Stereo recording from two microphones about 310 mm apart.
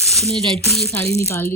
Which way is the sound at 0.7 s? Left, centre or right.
Centre.